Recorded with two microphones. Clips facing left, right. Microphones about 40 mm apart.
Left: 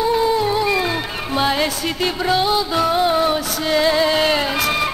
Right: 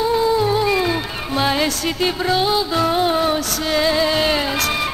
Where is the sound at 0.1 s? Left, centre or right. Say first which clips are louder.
Even; centre.